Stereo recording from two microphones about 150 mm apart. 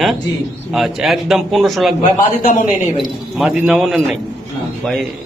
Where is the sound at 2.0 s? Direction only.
60° left (ahead or behind).